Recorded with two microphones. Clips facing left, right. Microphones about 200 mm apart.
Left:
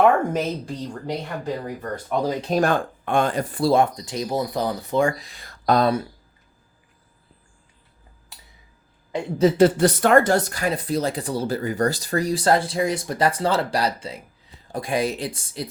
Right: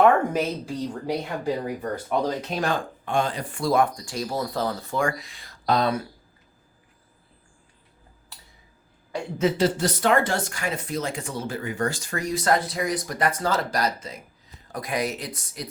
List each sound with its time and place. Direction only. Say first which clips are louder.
0.0 s speech: left 1 dB; centre (ahead or behind)
2.5 s speech: left 6 dB; 50° left (ahead or behind)
5.5 s a sound: left 4 dB; 50° left (ahead or behind)
9.1 s speech: left 4 dB; 20° left (ahead or behind)
9.6 s speech: left 7 dB; 55° left (ahead or behind); by 15.7 s 30° left (ahead or behind)